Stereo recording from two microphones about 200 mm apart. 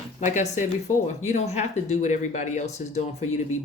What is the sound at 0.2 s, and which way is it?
Speech, 40° left (ahead or behind).